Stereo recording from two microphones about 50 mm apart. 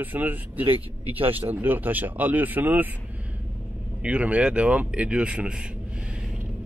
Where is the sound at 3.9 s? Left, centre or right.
Right.